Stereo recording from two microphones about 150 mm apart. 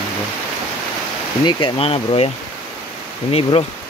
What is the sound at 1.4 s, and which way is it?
Speech, 35° left (ahead or behind).